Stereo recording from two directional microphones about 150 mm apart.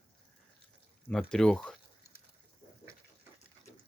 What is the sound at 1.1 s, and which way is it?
Speech, 5° left (ahead or behind).